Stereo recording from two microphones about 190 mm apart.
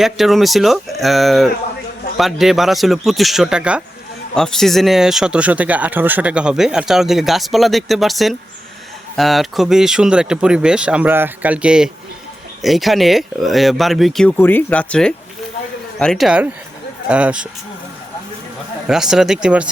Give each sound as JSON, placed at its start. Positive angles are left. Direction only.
{"t": 0.0, "sound": "speech", "side_deg": 0}
{"t": 18.9, "sound": "speech", "side_deg": -5}